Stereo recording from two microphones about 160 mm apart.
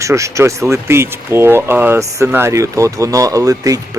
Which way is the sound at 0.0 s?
20° right (ahead or behind).